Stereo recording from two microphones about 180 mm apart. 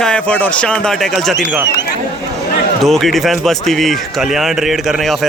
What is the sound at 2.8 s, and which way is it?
Speech, centre (ahead or behind).